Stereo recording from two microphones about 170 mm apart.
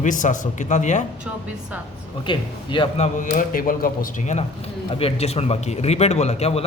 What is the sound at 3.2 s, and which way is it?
Speech, 55° left (ahead or behind).